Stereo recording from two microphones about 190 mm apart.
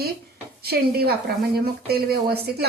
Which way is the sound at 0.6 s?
55° right (ahead or behind).